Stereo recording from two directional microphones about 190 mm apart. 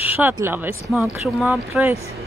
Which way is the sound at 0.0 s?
10° right (ahead or behind).